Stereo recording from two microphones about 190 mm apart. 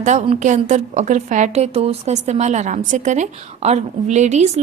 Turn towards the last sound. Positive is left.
turn(degrees=-35)  # may be behind; listen again after turning